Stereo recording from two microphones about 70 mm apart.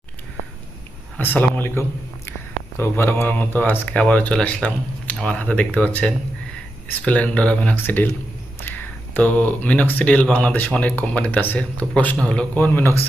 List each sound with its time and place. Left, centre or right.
1.2 s speech: left
7.8 s speech: left
9.1 s speech: left